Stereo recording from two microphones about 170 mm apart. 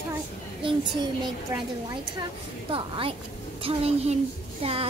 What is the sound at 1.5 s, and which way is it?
Speech, 15° right (ahead or behind).